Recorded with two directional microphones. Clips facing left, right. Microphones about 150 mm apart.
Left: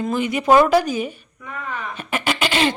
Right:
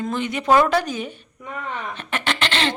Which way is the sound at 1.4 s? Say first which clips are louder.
Even; 20° right (ahead or behind).